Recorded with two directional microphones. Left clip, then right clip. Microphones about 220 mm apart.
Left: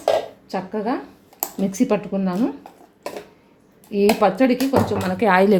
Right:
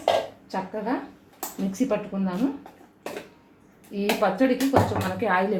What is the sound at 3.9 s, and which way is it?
A woman's voice, 50° left (ahead or behind).